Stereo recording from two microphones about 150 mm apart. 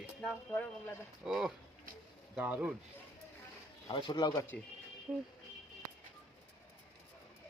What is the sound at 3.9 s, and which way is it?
Speech, 30° left (ahead or behind).